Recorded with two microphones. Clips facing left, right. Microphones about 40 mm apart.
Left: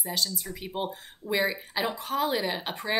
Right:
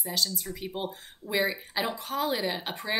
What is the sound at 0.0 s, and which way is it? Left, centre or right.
Speech, centre.